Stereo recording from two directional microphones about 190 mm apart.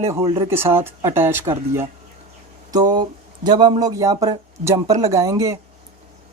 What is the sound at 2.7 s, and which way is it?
Speech, 25° right (ahead or behind).